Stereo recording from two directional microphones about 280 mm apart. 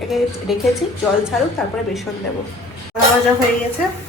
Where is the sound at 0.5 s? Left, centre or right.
Centre.